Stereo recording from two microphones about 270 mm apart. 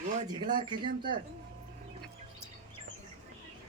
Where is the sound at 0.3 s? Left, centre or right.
Centre.